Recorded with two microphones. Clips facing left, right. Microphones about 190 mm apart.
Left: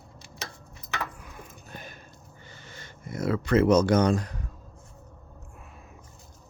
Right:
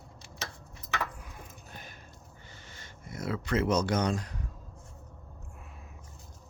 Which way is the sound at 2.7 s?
70° left (ahead or behind).